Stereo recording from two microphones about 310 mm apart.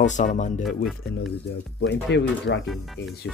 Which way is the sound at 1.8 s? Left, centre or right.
Left.